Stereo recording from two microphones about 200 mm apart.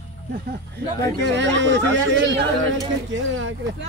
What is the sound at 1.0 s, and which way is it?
Speech, 60° right (ahead or behind).